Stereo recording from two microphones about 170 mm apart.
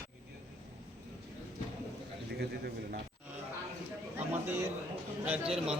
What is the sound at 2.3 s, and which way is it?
Speech, 70° right (ahead or behind).